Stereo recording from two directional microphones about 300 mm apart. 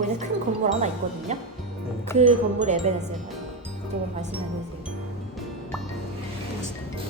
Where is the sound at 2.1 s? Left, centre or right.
Right.